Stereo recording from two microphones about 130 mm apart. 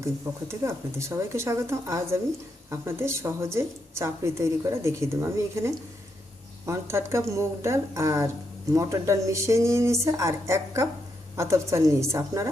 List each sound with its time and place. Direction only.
0.0 s a woman's voice: 20° right (ahead or behind)